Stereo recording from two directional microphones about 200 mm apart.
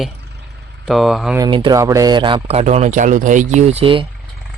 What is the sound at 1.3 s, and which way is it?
Speech, 20° right (ahead or behind).